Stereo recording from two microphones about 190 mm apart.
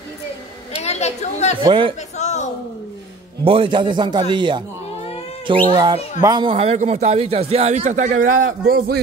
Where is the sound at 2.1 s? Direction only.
35° left (ahead or behind).